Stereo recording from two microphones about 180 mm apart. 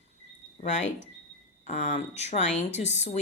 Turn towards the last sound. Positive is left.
turn(degrees=40)  # may be behind; listen again after turning